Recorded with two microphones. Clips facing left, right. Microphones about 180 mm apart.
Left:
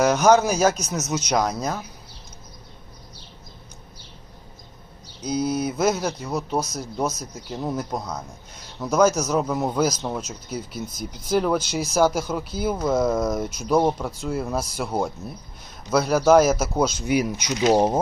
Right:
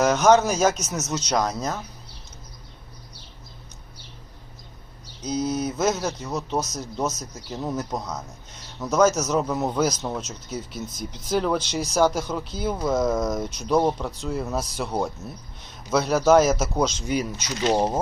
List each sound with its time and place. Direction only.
0.0 s speech: centre (ahead or behind)
1.1 s speech: 15° left (ahead or behind)
5.2 s speech: 10° left (ahead or behind)